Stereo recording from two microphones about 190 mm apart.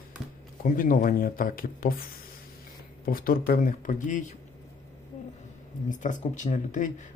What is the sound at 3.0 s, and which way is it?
Speech, 50° left (ahead or behind).